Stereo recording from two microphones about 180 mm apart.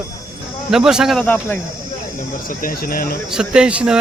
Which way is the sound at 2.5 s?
50° left (ahead or behind).